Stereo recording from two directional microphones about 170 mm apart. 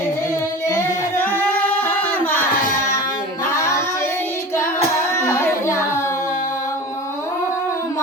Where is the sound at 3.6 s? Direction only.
15° left (ahead or behind).